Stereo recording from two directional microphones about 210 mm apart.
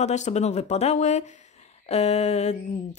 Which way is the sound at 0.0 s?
35° left (ahead or behind).